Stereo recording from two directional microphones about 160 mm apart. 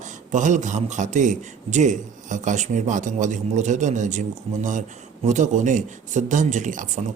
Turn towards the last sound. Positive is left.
turn(degrees=-55)  # may be behind; listen again after turning